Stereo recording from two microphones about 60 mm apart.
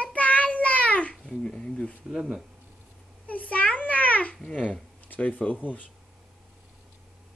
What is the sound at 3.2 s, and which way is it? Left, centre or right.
Babbling, left.